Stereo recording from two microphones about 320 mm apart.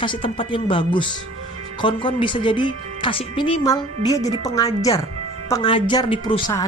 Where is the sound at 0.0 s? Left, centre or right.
Centre.